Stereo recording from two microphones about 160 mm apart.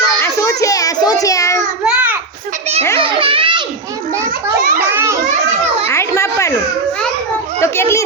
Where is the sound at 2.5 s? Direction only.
40° right (ahead or behind).